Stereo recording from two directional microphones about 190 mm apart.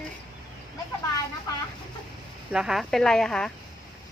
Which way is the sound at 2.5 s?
Centre (ahead or behind).